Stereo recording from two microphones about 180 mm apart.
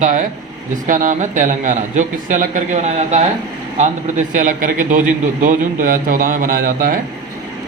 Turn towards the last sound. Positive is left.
turn(degrees=-50)  # may be behind; listen again after turning